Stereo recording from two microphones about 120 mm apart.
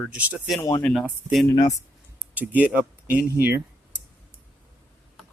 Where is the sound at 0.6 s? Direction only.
30° left (ahead or behind).